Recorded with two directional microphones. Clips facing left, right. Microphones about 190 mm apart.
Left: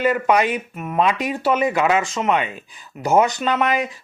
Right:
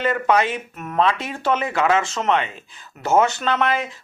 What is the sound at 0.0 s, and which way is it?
A man's voice, 15° left (ahead or behind).